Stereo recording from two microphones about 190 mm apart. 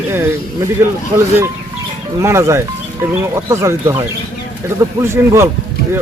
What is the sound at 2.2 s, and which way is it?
Speech, 15° right (ahead or behind).